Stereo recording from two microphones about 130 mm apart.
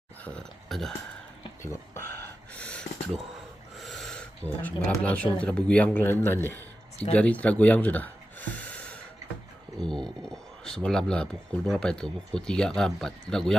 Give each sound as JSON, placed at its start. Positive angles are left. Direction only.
{"t": 0.3, "sound": "speech", "side_deg": 5}
{"t": 1.6, "sound": "a sound", "side_deg": 20}
{"t": 3.8, "sound": "speech", "side_deg": 0}